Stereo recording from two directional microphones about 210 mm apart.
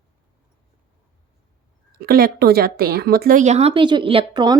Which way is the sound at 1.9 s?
45° right (ahead or behind).